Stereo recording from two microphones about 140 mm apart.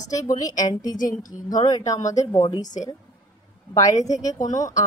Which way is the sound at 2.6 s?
60° left (ahead or behind).